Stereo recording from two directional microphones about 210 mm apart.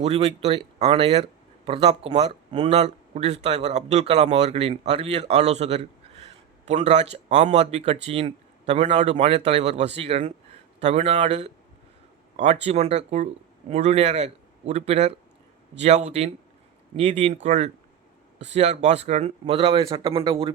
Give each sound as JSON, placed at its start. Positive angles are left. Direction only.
{"t": 0.0, "sound": "speech", "side_deg": -30}